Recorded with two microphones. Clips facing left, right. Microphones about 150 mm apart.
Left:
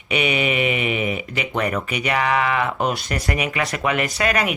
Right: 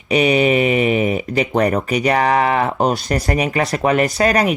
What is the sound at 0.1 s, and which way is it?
Speech, 35° right (ahead or behind).